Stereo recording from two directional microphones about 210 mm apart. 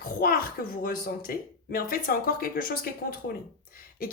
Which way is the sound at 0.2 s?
45° left (ahead or behind).